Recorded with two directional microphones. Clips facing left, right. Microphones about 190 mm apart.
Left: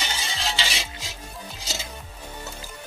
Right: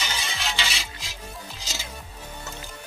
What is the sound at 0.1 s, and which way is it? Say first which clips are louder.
Music: left 1 dB; 30° left (ahead or behind).